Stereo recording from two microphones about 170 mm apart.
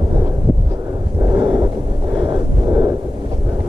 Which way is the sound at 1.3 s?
30° right (ahead or behind).